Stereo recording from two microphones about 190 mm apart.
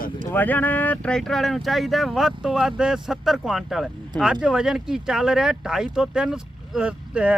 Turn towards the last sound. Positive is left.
turn(degrees=-5)  # may be behind; listen again after turning